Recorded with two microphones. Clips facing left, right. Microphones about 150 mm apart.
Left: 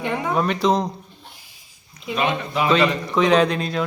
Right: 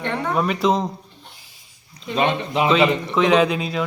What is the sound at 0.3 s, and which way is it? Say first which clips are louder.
Speech: even; 5° right (ahead or behind).